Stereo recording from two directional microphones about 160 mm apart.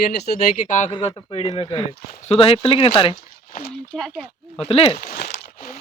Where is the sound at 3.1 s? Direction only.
60° left (ahead or behind).